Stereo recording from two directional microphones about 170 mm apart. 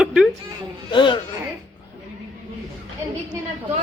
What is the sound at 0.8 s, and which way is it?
Speech, 30° left (ahead or behind).